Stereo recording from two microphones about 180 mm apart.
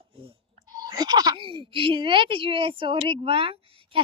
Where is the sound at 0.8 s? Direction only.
20° right (ahead or behind).